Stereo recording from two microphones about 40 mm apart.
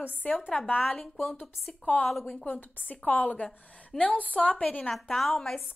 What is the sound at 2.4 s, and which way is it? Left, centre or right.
A woman's voice, left.